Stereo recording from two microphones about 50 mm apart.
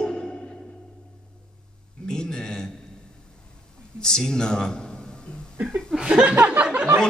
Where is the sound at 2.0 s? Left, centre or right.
Centre.